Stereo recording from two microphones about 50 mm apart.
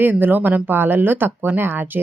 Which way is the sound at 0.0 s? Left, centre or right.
Right.